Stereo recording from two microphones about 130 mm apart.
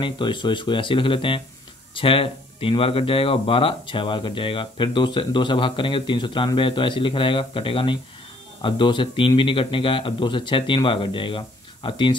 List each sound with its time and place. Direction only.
0.0 s speech: 35° left (ahead or behind)